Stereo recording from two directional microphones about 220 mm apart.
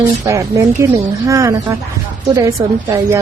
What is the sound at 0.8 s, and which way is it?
A woman's voice, 15° right (ahead or behind).